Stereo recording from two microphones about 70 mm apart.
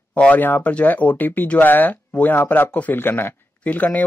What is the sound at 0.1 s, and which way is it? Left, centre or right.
Speech, left.